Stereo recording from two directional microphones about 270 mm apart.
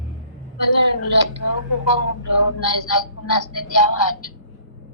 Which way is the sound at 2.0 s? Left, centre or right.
Left.